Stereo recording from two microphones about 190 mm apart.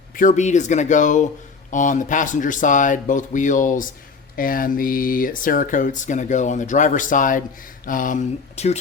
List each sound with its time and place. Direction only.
0.1 s speech: 45° left (ahead or behind)